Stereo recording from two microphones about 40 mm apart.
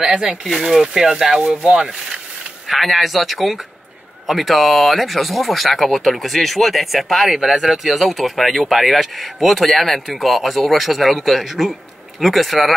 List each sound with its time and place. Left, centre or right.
0.0 s speech: centre
0.5 s speech: centre
0.9 s speech: centre
2.7 s speech: centre